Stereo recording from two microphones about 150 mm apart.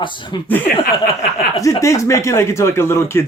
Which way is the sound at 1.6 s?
20° left (ahead or behind).